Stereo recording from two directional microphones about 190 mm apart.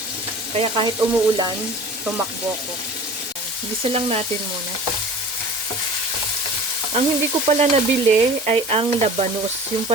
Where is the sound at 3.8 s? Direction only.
30° right (ahead or behind).